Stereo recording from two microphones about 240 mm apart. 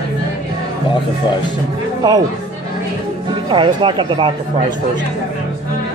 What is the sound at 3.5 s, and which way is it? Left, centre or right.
Speech, centre.